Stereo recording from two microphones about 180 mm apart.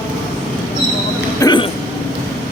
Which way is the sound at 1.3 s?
20° left (ahead or behind).